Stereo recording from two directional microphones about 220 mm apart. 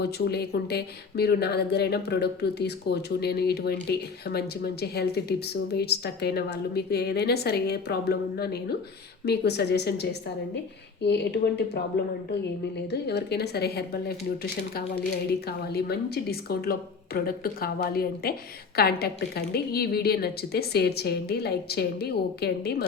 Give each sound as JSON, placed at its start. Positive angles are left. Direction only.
{"t": 0.0, "sound": "speech", "side_deg": 45}
{"t": 12.9, "sound": "speech", "side_deg": 50}
{"t": 15.3, "sound": "speech", "side_deg": 45}